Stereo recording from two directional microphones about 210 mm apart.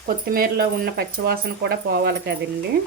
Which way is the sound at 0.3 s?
45° right (ahead or behind).